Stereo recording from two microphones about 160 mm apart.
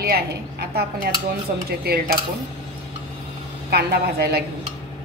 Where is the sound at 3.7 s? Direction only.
80° right.